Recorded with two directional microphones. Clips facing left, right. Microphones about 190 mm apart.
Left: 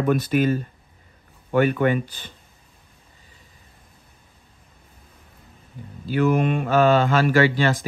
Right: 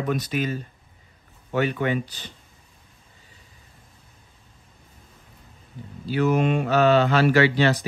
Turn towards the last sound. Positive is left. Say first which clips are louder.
# even
turn(degrees=45)  # may be behind; listen again after turning